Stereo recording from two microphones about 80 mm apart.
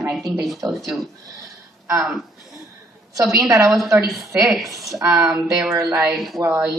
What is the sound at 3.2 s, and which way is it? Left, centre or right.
Speech, right.